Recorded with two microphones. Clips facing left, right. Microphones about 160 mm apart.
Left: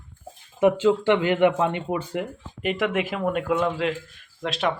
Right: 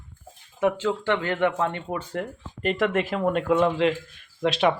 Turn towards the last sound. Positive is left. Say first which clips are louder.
# right 4 dB
turn(degrees=0)  # may be behind; listen again after turning